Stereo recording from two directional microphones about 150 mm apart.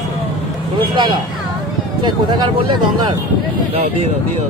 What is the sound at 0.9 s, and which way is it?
Speech, 30° right (ahead or behind).